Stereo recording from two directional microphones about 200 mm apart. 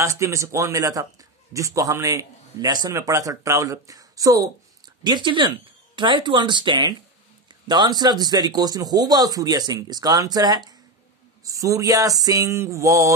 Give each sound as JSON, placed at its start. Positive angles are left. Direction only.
{"t": 0.0, "sound": "a man's voice", "side_deg": -15}